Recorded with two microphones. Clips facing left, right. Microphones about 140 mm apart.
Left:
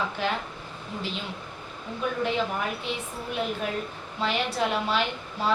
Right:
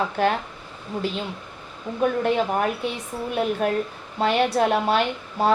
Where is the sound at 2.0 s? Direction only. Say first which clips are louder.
Right 6 dB; 50° right (ahead or behind).